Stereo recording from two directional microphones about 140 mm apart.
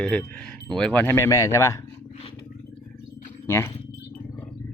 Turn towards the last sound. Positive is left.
turn(degrees=20)  # may be behind; listen again after turning